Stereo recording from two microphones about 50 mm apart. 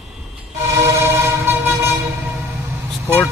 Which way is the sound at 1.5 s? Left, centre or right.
Right.